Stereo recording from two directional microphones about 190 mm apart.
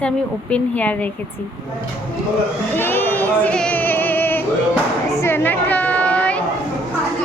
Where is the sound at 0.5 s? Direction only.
10° left (ahead or behind).